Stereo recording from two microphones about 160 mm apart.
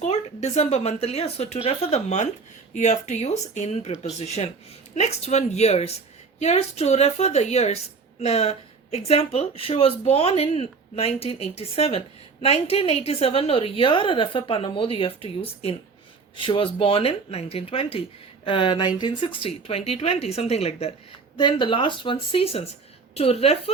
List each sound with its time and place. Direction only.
0.0 s a woman's voice: 45° left (ahead or behind)